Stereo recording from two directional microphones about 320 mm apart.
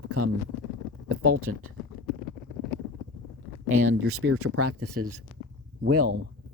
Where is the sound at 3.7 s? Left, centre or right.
Right.